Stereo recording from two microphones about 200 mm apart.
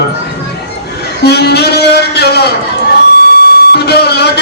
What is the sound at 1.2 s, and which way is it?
A man's voice, 55° left (ahead or behind).